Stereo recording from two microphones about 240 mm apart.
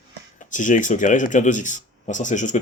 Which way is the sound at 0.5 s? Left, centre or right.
Left.